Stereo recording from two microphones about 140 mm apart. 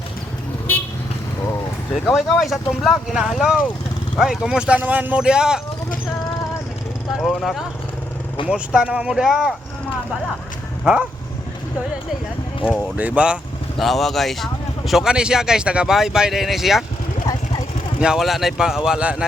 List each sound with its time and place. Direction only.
2.0 s speech: centre (ahead or behind)
7.3 s speech: centre (ahead or behind)
12.6 s speech: 10° right (ahead or behind)
18.0 s speech: 5° right (ahead or behind)